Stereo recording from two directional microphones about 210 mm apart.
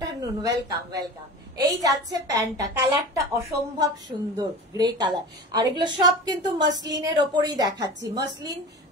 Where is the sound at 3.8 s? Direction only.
20° right (ahead or behind).